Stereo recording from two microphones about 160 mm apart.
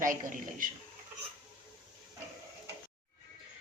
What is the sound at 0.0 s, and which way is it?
Speech, 55° right (ahead or behind).